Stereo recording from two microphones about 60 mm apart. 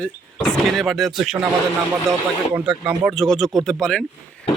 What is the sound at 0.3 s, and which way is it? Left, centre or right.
Speech, centre.